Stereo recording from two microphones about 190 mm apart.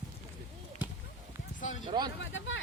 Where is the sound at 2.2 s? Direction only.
90° left.